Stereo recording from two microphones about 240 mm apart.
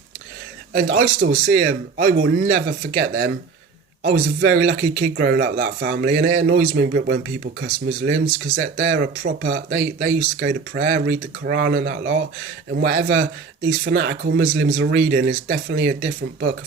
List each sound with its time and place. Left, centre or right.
0.7 s speech: right